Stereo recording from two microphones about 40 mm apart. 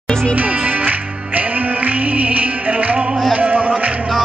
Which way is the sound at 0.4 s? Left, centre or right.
Right.